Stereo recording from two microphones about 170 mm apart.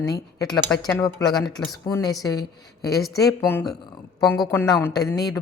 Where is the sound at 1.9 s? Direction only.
20° left (ahead or behind).